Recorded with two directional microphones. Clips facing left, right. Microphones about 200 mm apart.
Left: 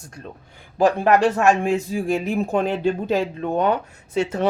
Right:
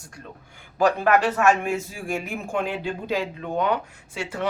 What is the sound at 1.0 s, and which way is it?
Speech, 30° left (ahead or behind).